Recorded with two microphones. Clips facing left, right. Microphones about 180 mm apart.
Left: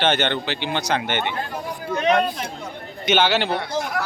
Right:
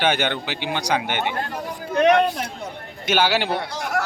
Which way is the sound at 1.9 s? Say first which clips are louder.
Right 3 dB; 60° right (ahead or behind).